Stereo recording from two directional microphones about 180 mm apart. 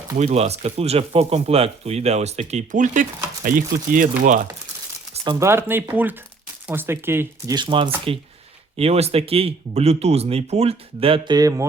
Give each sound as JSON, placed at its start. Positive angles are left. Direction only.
{"t": 0.2, "sound": "speech", "side_deg": -35}
{"t": 5.1, "sound": "a sound", "side_deg": -30}
{"t": 5.4, "sound": "speech", "side_deg": -15}
{"t": 7.5, "sound": "speech", "side_deg": -25}